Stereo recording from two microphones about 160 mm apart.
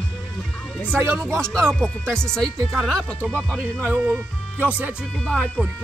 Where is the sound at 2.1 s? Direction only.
5° left (ahead or behind).